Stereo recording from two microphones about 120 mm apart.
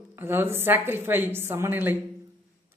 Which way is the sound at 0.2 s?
20° right (ahead or behind).